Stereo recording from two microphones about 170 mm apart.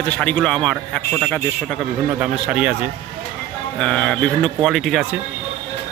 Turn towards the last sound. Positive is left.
turn(degrees=0)  # may be behind; listen again after turning